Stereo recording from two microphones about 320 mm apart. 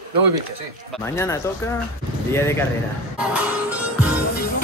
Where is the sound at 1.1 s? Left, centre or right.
Centre.